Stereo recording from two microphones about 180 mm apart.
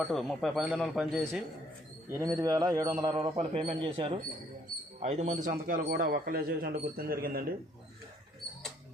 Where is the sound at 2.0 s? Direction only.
20° right (ahead or behind).